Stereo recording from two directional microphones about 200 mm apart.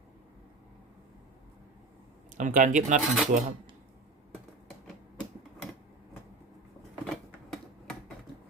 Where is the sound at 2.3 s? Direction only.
40° right (ahead or behind).